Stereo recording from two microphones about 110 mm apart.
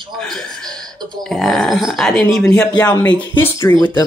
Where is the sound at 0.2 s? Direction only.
5° left (ahead or behind).